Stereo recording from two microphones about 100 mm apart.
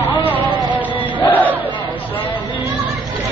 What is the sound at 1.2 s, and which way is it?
Battle cry, 20° left (ahead or behind).